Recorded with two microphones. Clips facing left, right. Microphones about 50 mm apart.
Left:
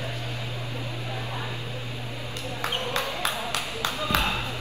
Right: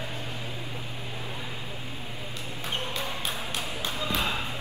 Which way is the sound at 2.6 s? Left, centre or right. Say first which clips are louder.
Left 4 dB; left.